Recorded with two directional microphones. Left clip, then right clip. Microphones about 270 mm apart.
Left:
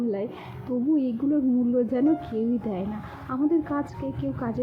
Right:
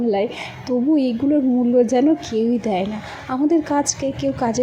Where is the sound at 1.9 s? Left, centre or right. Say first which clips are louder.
Right 7 dB; centre.